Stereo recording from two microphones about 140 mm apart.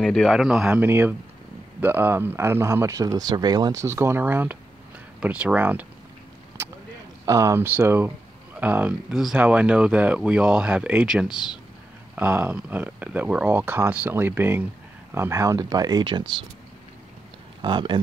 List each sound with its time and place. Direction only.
0.0 s a man's voice: 5° left (ahead or behind)
7.2 s speech: 20° right (ahead or behind)
17.6 s speech: 35° right (ahead or behind)